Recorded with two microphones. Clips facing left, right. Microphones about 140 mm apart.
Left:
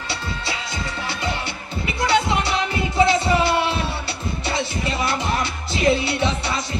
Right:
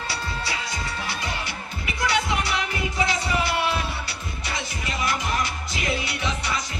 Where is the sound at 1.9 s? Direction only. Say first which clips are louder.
Left 5 dB; 30° left (ahead or behind).